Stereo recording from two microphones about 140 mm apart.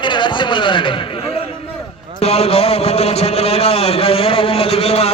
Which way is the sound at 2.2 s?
45° left (ahead or behind).